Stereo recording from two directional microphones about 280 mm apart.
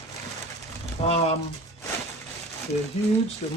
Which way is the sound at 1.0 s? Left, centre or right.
Left.